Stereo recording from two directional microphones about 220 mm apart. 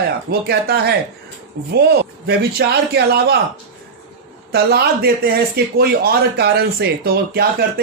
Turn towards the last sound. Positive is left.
turn(degrees=-45)  # may be behind; listen again after turning